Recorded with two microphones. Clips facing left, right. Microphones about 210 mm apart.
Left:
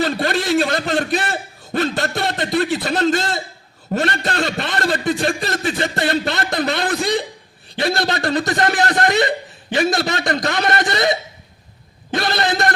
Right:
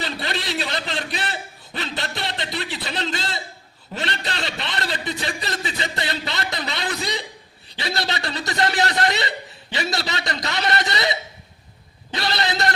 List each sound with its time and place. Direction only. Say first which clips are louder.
0.0 s a man's voice: left 9 dB; 50° left (ahead or behind)